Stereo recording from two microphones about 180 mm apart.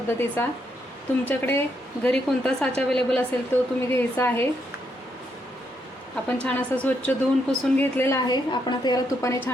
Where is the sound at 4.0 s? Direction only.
10° left (ahead or behind).